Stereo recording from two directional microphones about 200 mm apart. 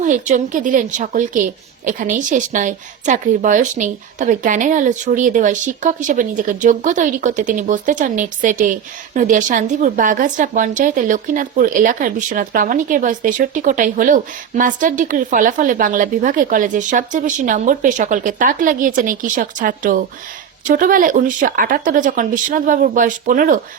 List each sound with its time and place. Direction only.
0.0 s a woman's voice: 40° right (ahead or behind)